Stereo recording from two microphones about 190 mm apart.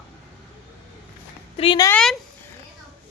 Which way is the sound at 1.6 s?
30° left (ahead or behind).